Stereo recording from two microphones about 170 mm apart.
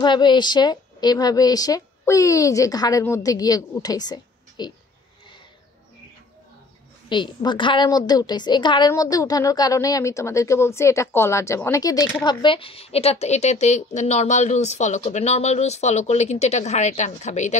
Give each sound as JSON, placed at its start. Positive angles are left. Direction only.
{"t": 0.0, "sound": "a woman's voice", "side_deg": 25}
{"t": 7.1, "sound": "a woman's voice", "side_deg": 25}